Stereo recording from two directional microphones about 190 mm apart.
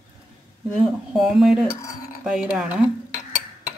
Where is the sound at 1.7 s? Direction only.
15° left (ahead or behind).